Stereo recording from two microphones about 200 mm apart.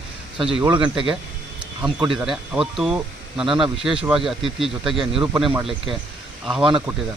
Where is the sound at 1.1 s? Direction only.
5° right (ahead or behind).